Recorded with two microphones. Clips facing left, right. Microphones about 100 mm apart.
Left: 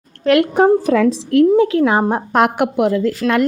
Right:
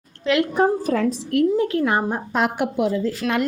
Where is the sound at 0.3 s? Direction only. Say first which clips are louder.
Left 7 dB; 70° left (ahead or behind).